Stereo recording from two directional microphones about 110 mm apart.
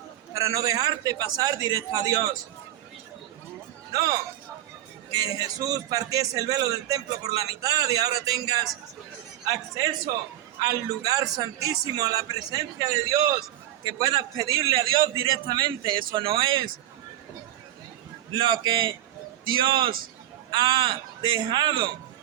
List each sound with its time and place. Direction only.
0.3 s a man's voice: 30° right (ahead or behind)
3.9 s a man's voice: 35° right (ahead or behind)
10.6 s a man's voice: 35° right (ahead or behind)
18.3 s a man's voice: 45° right (ahead or behind)